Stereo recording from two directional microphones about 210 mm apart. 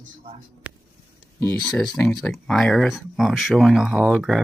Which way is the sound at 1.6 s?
Centre (ahead or behind).